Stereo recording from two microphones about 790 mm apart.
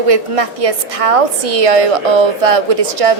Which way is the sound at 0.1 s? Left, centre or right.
Right.